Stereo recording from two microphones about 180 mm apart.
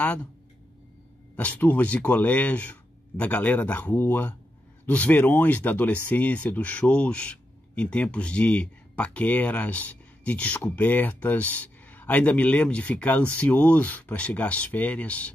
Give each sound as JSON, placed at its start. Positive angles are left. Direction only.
{"t": 0.0, "sound": "speech", "side_deg": 10}
{"t": 1.3, "sound": "speech", "side_deg": 10}